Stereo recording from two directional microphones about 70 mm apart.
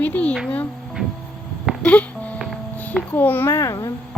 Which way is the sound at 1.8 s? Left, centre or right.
Centre.